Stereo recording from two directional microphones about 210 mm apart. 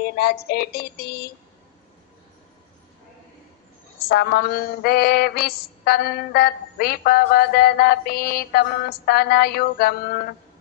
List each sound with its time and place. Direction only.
0.0 s mantra: 45° left (ahead or behind)
4.1 s mantra: 45° left (ahead or behind)